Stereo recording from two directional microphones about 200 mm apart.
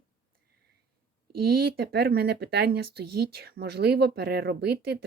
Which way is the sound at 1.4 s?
50° right (ahead or behind).